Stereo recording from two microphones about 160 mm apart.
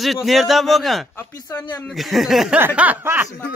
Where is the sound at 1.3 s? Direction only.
25° left (ahead or behind).